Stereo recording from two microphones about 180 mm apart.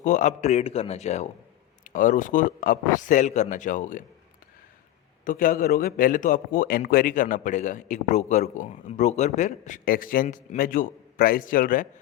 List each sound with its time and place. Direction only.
0.0 s a man's voice: 45° left (ahead or behind)
5.2 s a man's voice: 50° left (ahead or behind)